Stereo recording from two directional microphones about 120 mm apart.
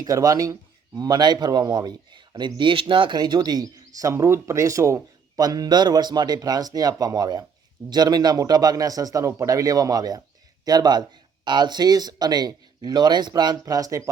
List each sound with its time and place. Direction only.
0.0 s speech: 30° right (ahead or behind)